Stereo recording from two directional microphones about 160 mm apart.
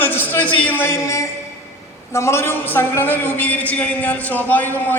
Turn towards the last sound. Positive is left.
turn(degrees=10)  # may be behind; listen again after turning